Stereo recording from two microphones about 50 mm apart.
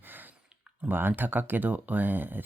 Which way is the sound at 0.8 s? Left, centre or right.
Right.